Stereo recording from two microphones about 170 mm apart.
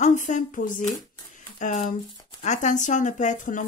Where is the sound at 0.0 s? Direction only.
45° left (ahead or behind).